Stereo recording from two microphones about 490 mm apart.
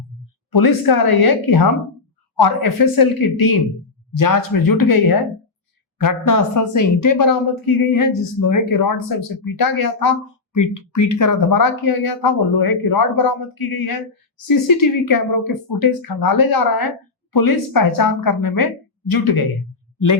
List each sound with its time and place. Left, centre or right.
0.5 s speech: left